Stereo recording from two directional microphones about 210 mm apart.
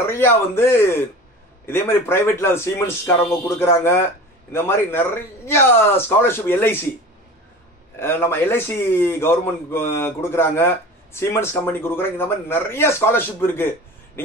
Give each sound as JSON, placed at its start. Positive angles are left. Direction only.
{"t": 0.0, "sound": "speech", "side_deg": 10}
{"t": 8.0, "sound": "speech", "side_deg": 10}